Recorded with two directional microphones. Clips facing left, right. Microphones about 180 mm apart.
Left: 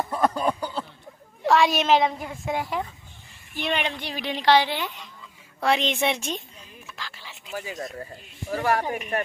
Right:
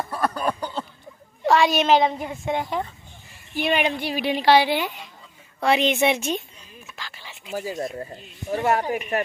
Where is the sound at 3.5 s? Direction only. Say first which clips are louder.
Right 5 dB; 10° right (ahead or behind).